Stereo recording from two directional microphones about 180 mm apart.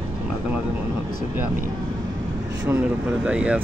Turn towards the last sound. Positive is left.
turn(degrees=-5)  # may be behind; listen again after turning